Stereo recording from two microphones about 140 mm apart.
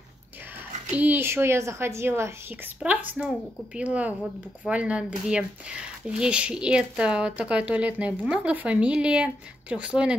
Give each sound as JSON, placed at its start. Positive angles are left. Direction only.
{"t": 0.9, "sound": "a woman's voice", "side_deg": -15}